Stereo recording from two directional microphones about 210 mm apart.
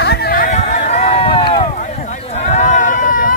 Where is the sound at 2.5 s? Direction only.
35° left (ahead or behind).